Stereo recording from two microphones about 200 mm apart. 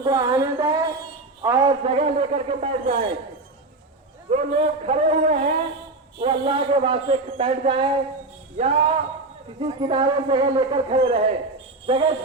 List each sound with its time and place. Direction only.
0.0 s speech: 20° right (ahead or behind)
1.5 s a sound: 15° right (ahead or behind)
1.8 s speech: 25° right (ahead or behind)
4.3 s speech: 35° right (ahead or behind)